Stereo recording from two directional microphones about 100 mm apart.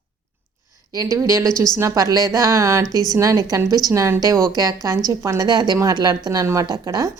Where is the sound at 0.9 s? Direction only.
35° right (ahead or behind).